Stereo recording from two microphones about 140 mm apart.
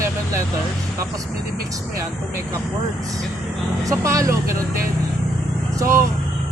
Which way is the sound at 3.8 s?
20° right (ahead or behind).